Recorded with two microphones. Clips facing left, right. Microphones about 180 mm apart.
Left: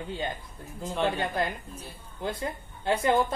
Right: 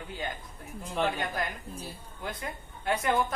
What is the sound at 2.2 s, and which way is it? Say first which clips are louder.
Speech: left 6 dB; 30° left (ahead or behind).